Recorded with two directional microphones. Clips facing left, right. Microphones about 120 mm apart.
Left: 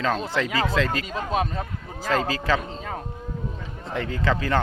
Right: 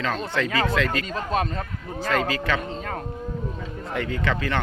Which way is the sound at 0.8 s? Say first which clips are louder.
Even; 25° left (ahead or behind).